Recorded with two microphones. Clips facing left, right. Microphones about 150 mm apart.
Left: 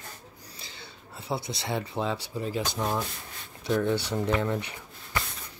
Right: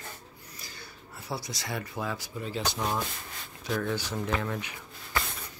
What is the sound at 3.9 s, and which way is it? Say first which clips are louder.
Speech: left 4 dB; 65° left (ahead or behind).